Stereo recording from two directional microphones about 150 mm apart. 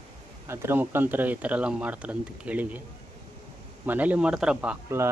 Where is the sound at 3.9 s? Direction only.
10° right (ahead or behind).